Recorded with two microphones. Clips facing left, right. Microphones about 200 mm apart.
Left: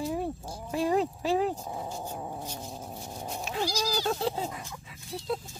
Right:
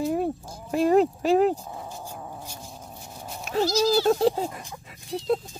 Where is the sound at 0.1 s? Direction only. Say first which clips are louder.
Right 6 dB; 55° right (ahead or behind).